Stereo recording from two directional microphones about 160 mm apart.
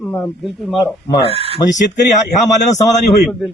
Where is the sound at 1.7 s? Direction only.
50° left (ahead or behind).